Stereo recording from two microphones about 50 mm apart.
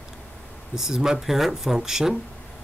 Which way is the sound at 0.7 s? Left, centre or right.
Centre.